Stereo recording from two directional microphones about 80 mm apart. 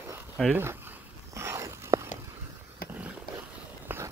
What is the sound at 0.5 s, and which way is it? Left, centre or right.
Speech, right.